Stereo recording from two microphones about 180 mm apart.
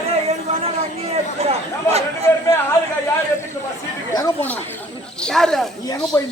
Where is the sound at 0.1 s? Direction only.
35° right (ahead or behind).